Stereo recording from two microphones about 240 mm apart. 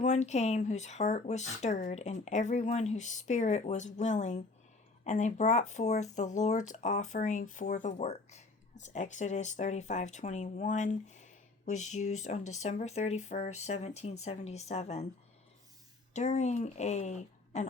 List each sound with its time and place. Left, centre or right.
0.0 s speech: left
16.1 s speech: left